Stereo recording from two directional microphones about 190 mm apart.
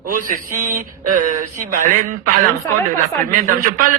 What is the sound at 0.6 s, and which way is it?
A man's voice, 40° right (ahead or behind).